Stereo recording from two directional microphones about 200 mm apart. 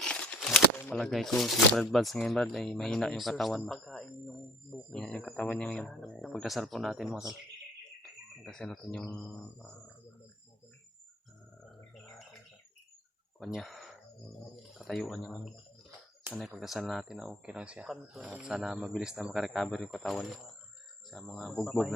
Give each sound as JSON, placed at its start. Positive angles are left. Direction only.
{"t": 0.0, "sound": "speech", "side_deg": 5}
{"t": 8.4, "sound": "speech", "side_deg": 5}
{"t": 13.4, "sound": "speech", "side_deg": 0}